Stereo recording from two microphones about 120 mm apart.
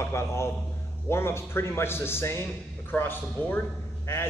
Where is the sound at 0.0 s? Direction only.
25° left (ahead or behind).